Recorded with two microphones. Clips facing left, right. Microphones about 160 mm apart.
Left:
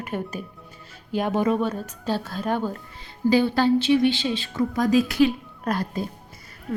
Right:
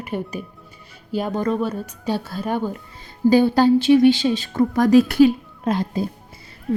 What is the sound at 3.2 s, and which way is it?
Speech, 45° right (ahead or behind).